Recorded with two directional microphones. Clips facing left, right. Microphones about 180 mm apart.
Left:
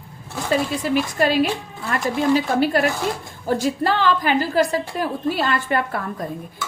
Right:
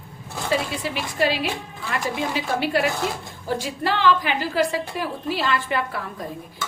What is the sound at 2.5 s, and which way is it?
A woman's voice, 45° left (ahead or behind).